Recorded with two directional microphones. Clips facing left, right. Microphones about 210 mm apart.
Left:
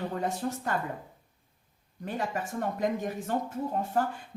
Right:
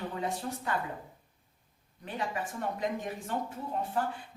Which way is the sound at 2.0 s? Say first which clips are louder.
Left 3 dB; 45° left (ahead or behind).